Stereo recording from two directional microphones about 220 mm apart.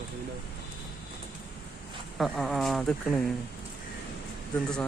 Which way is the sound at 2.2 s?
Centre (ahead or behind).